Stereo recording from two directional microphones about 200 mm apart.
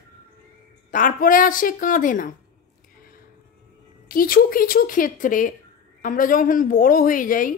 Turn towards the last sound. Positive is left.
turn(degrees=40)  # may be behind; listen again after turning